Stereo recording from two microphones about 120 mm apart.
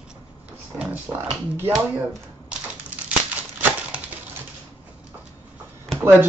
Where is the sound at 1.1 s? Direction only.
15° right (ahead or behind).